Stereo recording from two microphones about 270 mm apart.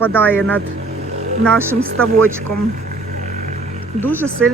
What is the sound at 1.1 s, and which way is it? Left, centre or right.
Roaring cats, right.